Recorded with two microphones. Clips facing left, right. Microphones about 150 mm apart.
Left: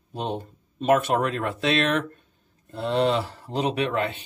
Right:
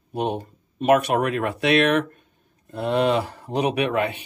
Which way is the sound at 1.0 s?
65° right (ahead or behind).